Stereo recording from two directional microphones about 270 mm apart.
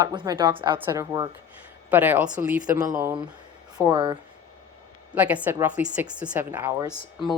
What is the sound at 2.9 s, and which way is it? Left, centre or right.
Speech, centre.